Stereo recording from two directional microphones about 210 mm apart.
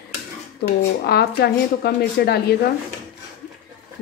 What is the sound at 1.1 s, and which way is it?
A woman's voice, 50° left (ahead or behind).